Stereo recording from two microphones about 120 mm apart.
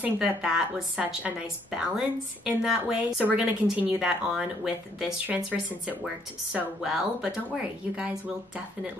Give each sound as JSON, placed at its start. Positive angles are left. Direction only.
{"t": 0.0, "sound": "a woman's voice", "side_deg": -5}